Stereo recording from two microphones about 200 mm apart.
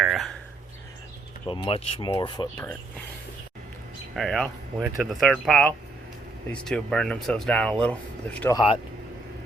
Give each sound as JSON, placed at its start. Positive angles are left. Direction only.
{"t": 0.0, "sound": "a sound", "side_deg": 0}
{"t": 1.5, "sound": "speech", "side_deg": 25}
{"t": 4.1, "sound": "speech", "side_deg": 0}
{"t": 8.5, "sound": "speech", "side_deg": 25}